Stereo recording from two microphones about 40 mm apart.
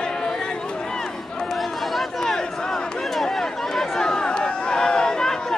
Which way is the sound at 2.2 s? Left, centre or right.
Centre.